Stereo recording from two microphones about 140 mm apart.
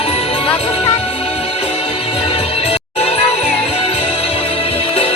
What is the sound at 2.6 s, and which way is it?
Music, 45° left (ahead or behind).